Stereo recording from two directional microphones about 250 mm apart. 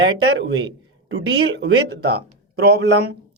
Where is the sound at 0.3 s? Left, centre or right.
Right.